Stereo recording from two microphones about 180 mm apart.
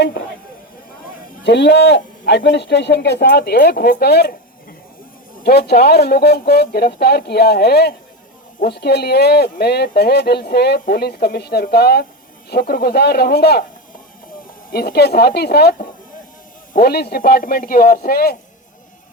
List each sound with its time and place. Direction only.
1.5 s speech: 70° left (ahead or behind)
5.4 s speech: 60° left (ahead or behind)
14.7 s speech: 60° left (ahead or behind)